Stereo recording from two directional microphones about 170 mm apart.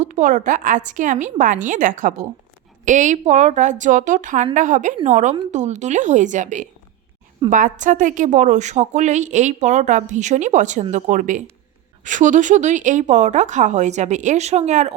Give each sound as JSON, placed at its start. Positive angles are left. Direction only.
{"t": 0.0, "sound": "a woman's voice", "side_deg": -45}